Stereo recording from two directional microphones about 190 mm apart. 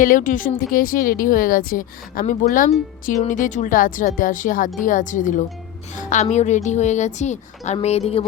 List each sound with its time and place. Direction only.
0.0 s a woman's voice: 45° left (ahead or behind)